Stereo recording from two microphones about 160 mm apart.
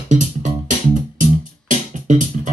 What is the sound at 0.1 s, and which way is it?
Music, 50° right (ahead or behind).